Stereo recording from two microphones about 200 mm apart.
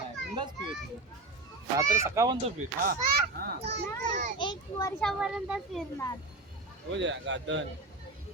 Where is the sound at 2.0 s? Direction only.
15° right (ahead or behind).